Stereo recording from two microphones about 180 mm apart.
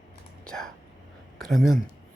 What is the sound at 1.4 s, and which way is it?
Speech, centre (ahead or behind).